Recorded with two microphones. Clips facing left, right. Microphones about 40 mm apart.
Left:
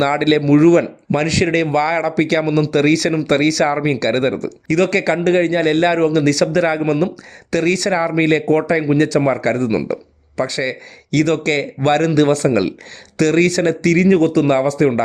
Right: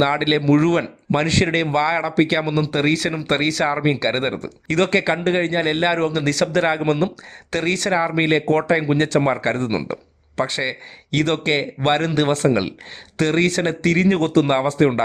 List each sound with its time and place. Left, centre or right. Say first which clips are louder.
0.0 s a man's voice: left 3 dB; centre
0.6 s a man's voice: left 7 dB; right
1.7 s a man's voice: left 2 dB; right
5.5 s a man's voice: left 4 dB; centre
6.0 s a man's voice: left 5 dB; right
8.4 s a man's voice: left 3 dB; right
12.5 s a man's voice: left 3 dB; centre; by 14.4 s right
14.4 s speech: left 3 dB; right